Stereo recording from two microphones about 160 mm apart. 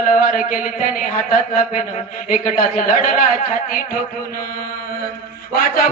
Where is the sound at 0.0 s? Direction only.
55° left (ahead or behind).